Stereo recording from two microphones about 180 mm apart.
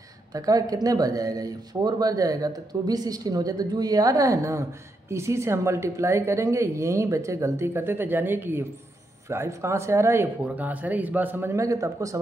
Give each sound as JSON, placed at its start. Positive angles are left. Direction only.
{"t": 0.3, "sound": "a woman's voice", "side_deg": -20}